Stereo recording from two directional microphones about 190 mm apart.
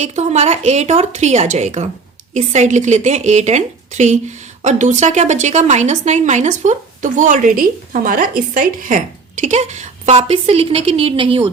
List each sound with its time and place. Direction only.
0.0 s speech: 35° right (ahead or behind)